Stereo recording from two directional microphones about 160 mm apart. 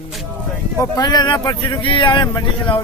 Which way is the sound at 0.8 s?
25° left (ahead or behind).